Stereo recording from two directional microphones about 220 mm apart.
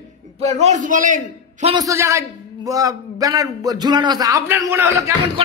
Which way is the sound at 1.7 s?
15° right (ahead or behind).